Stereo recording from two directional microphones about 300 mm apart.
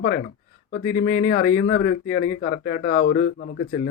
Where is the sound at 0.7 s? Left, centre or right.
Left.